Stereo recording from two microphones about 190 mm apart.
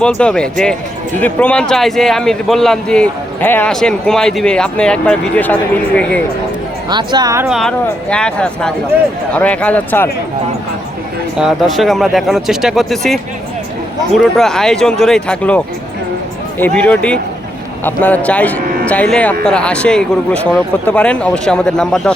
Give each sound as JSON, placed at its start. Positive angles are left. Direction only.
{"t": 0.0, "sound": "a man's voice", "side_deg": 5}
{"t": 6.9, "sound": "a woman's voice", "side_deg": -20}
{"t": 7.4, "sound": "a man's voice", "side_deg": 0}
{"t": 11.3, "sound": "a man's voice", "side_deg": 0}